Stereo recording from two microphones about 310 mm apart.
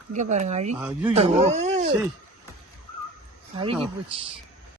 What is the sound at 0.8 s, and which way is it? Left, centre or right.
Speech, centre.